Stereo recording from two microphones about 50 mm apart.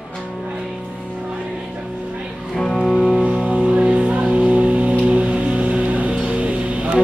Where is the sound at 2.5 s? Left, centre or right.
Centre.